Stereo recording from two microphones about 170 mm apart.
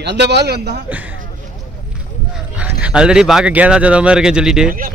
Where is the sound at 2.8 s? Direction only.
5° right (ahead or behind).